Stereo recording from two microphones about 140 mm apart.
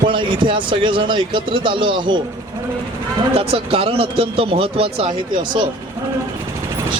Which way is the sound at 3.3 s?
45° right (ahead or behind).